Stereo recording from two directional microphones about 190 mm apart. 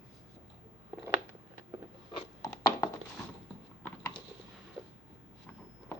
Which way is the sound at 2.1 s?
15° left (ahead or behind).